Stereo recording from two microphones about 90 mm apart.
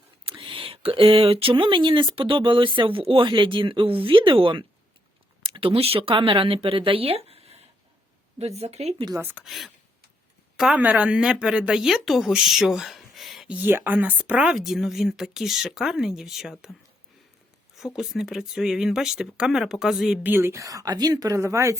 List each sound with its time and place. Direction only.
0.3 s speech: 70° right (ahead or behind)
5.4 s speech: 90° right
9.4 s a woman's voice: centre (ahead or behind)
10.8 s speech: 15° right (ahead or behind); by 13.5 s centre (ahead or behind)
13.5 s a woman's voice: 20° right (ahead or behind); by 16.7 s 5° right (ahead or behind)
17.7 s a woman's voice: 5° right (ahead or behind)
20.2 s speech: 25° right (ahead or behind)
20.5 s speech: 40° right (ahead or behind)